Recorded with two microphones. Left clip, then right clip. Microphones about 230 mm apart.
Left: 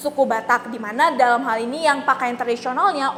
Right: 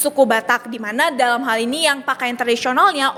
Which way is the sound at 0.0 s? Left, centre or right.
Right.